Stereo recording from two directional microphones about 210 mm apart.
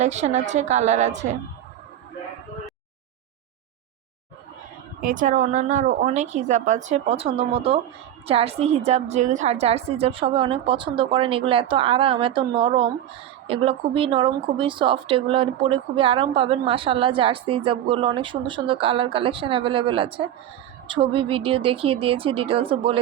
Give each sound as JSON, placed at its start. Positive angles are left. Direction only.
{"t": 0.0, "sound": "a woman's voice", "side_deg": -35}
{"t": 4.9, "sound": "a woman's voice", "side_deg": -40}